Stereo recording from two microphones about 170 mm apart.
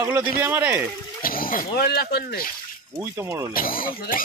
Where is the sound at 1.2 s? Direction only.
55° left (ahead or behind).